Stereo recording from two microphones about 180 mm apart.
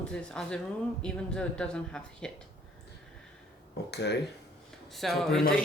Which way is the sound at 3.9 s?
70° left (ahead or behind).